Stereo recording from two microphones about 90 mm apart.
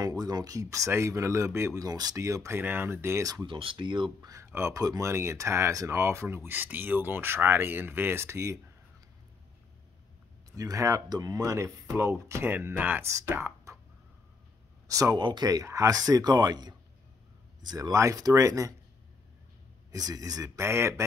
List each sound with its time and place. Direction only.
0.0 s speech: 45° right (ahead or behind); by 3.3 s 30° right (ahead or behind)
3.4 s speech: 75° right (ahead or behind); by 4.3 s 60° right (ahead or behind)
4.5 s speech: 30° right (ahead or behind)
4.7 s speech: 45° right (ahead or behind)
5.1 s speech: 30° right (ahead or behind)
10.5 s speech: 40° right (ahead or behind); by 13.0 s 20° right (ahead or behind)
13.0 s speech: 35° right (ahead or behind)
14.9 s speech: 40° right (ahead or behind)
15.1 s speech: 55° right (ahead or behind); by 18.8 s 40° right (ahead or behind)
19.9 s speech: 40° right (ahead or behind)